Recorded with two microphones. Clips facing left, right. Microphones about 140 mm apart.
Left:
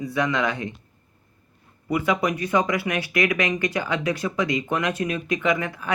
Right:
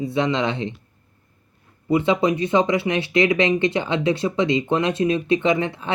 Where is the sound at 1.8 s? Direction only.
25° right (ahead or behind).